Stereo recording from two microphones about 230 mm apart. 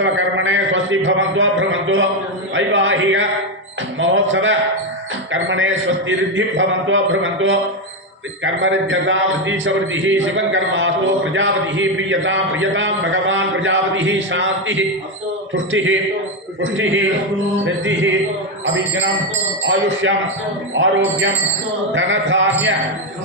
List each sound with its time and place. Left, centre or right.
0.0 s a man's voice: right
19.6 s a man's voice: right